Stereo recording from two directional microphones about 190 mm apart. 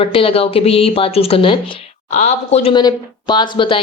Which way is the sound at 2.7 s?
20° left (ahead or behind).